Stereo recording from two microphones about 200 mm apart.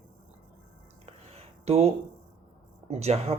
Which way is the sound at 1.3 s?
30° right (ahead or behind).